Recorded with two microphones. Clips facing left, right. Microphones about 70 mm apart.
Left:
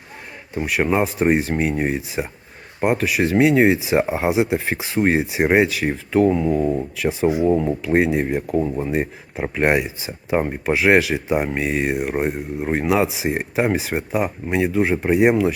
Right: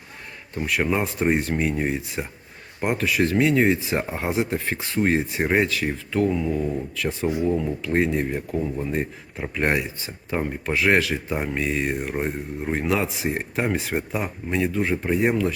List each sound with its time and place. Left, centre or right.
0.5 s speech: centre
3.3 s speech: left
7.0 s speech: centre
7.4 s speech: left
7.9 s speech: centre
8.5 s speech: left
9.8 s speech: centre
10.3 s speech: left
10.8 s speech: centre
14.5 s speech: centre